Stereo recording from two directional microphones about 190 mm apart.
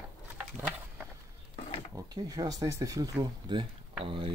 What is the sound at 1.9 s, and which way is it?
Speech, 20° right (ahead or behind).